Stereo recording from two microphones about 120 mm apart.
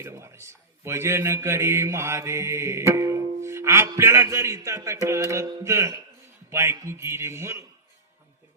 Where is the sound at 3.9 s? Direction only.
20° right (ahead or behind).